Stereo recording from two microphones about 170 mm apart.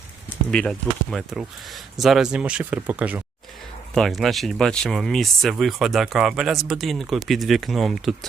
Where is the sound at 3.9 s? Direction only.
Centre (ahead or behind).